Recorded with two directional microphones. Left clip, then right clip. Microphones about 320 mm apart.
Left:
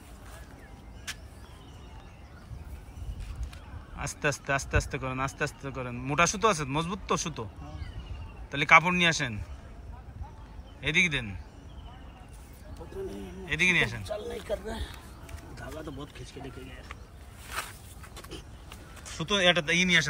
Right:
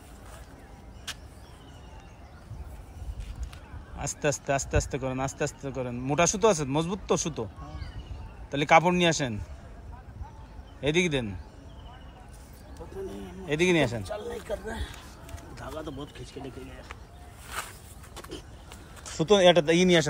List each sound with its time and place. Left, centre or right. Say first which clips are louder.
3.9 s a man's voice: right 1 dB; centre
8.5 s a man's voice: even; centre
10.8 s a man's voice: even; centre
13.5 s a man's voice: even; centre
16.4 s speech: right 3 dB; right
17.5 s walk: even; centre
19.2 s a man's voice: right 5 dB; centre